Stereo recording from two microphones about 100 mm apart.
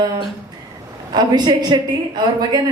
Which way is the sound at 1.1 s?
45° right (ahead or behind).